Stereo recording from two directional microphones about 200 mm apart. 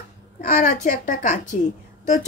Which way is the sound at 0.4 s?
45° left (ahead or behind).